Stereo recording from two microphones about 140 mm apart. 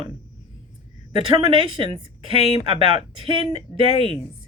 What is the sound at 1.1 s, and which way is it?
A woman's voice, 40° right (ahead or behind).